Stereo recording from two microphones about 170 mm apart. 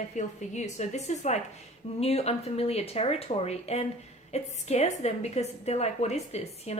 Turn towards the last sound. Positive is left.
turn(degrees=40)  # may be behind; listen again after turning